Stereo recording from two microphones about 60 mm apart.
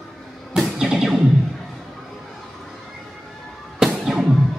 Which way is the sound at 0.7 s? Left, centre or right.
Centre.